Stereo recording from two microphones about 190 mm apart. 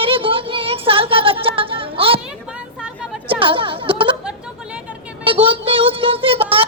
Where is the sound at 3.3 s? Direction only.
25° right (ahead or behind).